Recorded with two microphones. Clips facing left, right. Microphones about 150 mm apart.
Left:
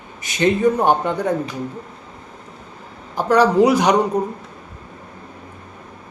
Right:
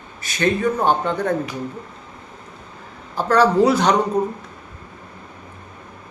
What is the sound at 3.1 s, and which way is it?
A man's voice, 15° left (ahead or behind).